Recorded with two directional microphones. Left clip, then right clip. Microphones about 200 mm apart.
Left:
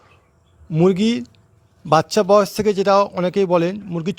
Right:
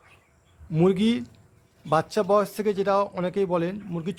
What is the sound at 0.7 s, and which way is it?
Speech, 30° left (ahead or behind).